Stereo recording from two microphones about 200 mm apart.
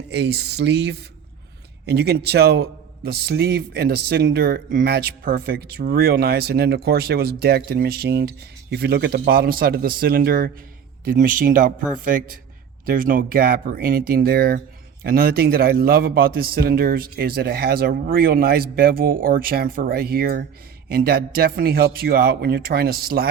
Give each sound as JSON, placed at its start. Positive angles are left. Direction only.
{"t": 0.1, "sound": "a man's voice", "side_deg": -60}
{"t": 12.8, "sound": "a man's voice", "side_deg": -45}